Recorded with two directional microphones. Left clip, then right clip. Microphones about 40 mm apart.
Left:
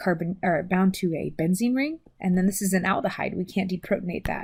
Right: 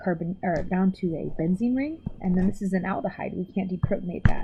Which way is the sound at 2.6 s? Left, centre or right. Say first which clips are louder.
Left 4 dB; left.